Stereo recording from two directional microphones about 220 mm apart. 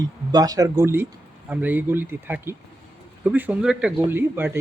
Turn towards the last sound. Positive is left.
turn(degrees=-10)  # may be behind; listen again after turning